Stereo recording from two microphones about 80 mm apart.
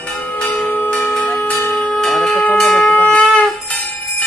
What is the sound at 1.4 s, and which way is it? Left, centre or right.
Wind instrument, left.